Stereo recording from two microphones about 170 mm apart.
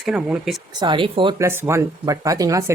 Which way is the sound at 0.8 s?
30° right (ahead or behind).